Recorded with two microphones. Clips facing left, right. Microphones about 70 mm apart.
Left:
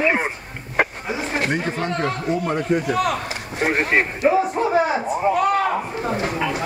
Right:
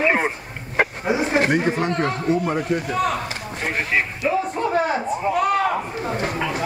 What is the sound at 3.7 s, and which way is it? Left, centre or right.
Speech, left.